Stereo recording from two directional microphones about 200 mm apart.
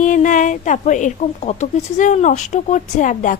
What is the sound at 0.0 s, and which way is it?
Speech, 40° left (ahead or behind).